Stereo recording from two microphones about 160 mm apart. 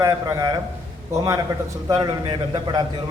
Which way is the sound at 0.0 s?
20° right (ahead or behind).